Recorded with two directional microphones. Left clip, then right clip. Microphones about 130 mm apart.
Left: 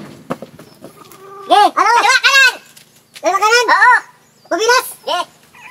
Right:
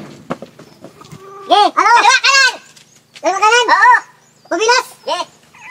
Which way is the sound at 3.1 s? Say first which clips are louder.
Right 1 dB; 10° left (ahead or behind).